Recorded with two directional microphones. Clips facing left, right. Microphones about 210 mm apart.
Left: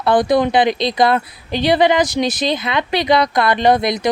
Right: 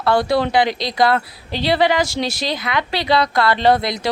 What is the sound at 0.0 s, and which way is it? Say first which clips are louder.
A woman's voice: left 3 dB; 20° left (ahead or behind).